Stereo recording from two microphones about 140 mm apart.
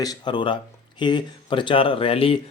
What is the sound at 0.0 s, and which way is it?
Speech, 30° left (ahead or behind).